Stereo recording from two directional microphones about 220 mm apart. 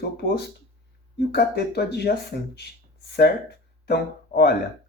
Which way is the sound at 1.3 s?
45° left (ahead or behind).